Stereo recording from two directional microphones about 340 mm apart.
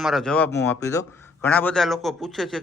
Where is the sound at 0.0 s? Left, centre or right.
Centre.